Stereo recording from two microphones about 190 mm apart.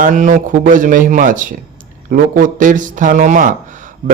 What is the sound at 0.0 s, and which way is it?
Speech, 40° right (ahead or behind).